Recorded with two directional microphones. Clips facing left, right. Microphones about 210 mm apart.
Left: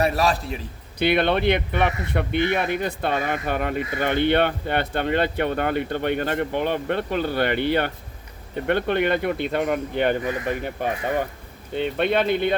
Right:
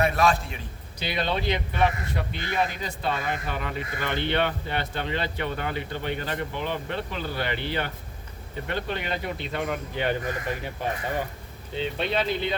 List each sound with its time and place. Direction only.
0.0 s a man's voice: 35° left (ahead or behind)
0.9 s speech: 60° left (ahead or behind)